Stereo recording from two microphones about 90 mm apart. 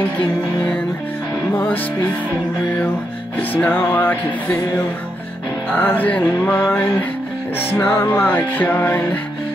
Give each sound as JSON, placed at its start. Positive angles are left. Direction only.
{"t": 1.5, "sound": "music", "side_deg": 20}
{"t": 3.3, "sound": "music", "side_deg": 20}
{"t": 5.8, "sound": "music", "side_deg": 20}
{"t": 7.5, "sound": "music", "side_deg": 30}